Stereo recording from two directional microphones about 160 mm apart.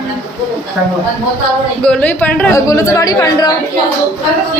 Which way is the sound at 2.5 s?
20° left (ahead or behind).